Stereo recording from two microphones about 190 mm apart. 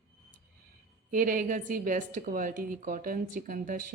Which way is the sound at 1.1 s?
45° right (ahead or behind).